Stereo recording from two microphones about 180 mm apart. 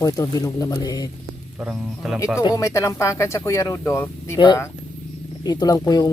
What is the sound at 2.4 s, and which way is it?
Speech, 15° left (ahead or behind).